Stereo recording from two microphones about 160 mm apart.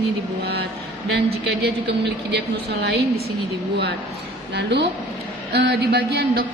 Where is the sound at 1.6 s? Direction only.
90° right.